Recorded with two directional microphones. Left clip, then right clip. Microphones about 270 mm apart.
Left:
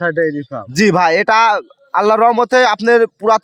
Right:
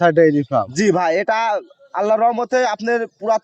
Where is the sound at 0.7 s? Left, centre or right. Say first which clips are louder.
Left 8 dB; left.